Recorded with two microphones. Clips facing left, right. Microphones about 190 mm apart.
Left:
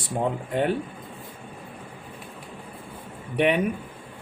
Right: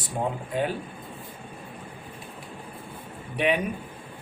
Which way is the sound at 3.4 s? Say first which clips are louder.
Left 3 dB; 60° left (ahead or behind).